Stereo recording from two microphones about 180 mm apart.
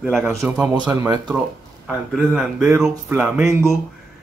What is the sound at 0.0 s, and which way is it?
Speech, 5° right (ahead or behind).